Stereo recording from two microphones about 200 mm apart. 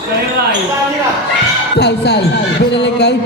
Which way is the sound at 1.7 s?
55° left (ahead or behind).